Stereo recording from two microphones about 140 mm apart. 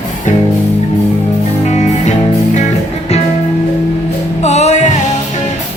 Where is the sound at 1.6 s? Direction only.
55° left (ahead or behind).